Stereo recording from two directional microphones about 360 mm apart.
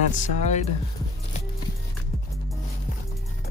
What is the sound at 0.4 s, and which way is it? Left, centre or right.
Speech, centre.